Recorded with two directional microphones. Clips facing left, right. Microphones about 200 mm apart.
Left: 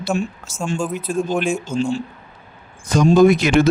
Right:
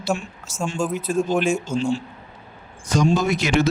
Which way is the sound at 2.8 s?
50° left (ahead or behind).